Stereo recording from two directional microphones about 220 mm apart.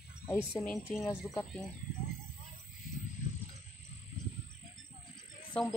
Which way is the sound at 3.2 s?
35° left (ahead or behind).